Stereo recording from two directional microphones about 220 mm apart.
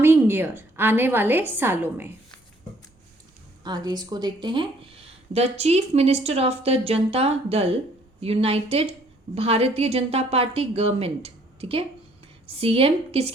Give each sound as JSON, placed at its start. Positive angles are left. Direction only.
{"t": 0.0, "sound": "a woman's voice", "side_deg": -10}
{"t": 3.6, "sound": "speech", "side_deg": -20}